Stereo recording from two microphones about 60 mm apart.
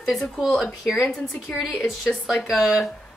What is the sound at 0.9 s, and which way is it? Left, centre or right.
Speech, left.